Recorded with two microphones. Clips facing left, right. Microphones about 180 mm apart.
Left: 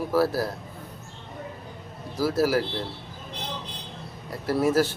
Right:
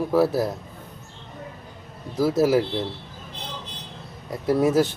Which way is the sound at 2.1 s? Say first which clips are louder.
Right 4 dB; 20° right (ahead or behind).